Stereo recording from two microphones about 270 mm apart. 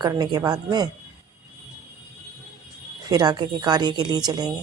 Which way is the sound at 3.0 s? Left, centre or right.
Centre.